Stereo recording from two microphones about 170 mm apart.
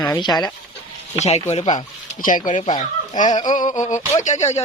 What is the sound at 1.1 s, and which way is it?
Speech, 40° left (ahead or behind).